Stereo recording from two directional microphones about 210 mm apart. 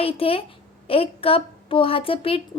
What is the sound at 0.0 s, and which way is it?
A woman's voice, 25° left (ahead or behind).